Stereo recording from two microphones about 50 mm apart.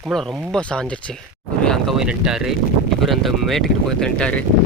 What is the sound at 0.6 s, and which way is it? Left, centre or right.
Speech, left.